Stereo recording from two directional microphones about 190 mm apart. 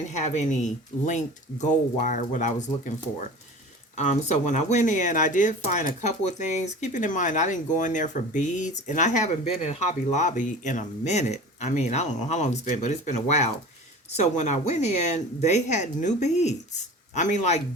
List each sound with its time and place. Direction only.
0.1 s speech: 35° left (ahead or behind)